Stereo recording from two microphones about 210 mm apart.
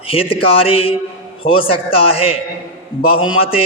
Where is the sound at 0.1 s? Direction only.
25° left (ahead or behind).